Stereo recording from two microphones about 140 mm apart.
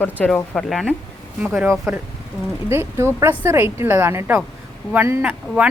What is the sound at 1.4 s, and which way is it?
Speech, 10° right (ahead or behind).